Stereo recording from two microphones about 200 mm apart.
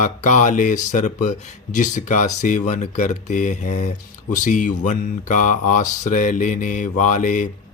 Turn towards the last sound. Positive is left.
turn(degrees=40)  # may be behind; listen again after turning